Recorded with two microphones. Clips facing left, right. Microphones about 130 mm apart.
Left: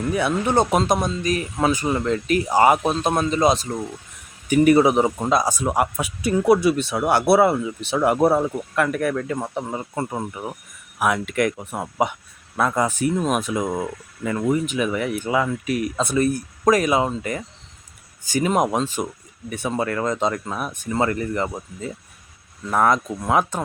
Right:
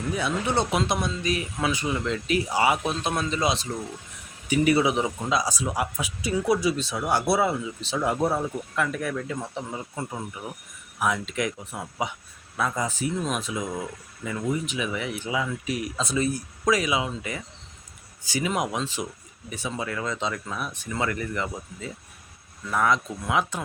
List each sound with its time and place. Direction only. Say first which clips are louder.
0.1 s a man's voice: left 5 dB; 60° left (ahead or behind)
13.6 s a man's voice: left 6 dB; 65° left (ahead or behind); by 23.6 s 45° left (ahead or behind)